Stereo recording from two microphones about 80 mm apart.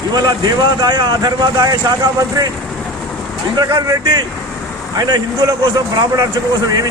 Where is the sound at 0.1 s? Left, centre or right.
Right.